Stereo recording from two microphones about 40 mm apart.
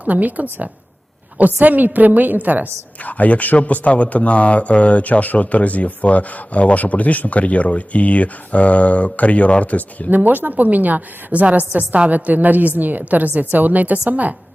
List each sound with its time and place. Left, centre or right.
0.0 s a woman's voice: right
3.0 s a man's voice: left
10.2 s a woman's voice: right